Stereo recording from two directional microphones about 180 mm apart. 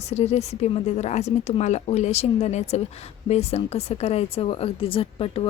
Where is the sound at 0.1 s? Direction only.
35° left (ahead or behind).